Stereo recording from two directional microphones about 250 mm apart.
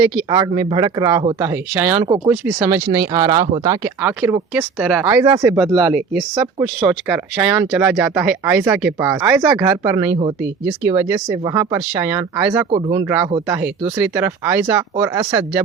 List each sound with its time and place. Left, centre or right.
0.3 s speech: centre
2.0 s speech: right
2.3 s speech: centre
5.2 s speech: centre
5.7 s speech: centre